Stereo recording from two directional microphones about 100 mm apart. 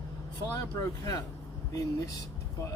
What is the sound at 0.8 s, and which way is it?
Speech, 35° left (ahead or behind).